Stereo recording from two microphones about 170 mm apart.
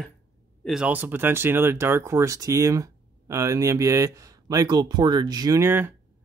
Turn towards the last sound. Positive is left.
turn(degrees=-10)  # may be behind; listen again after turning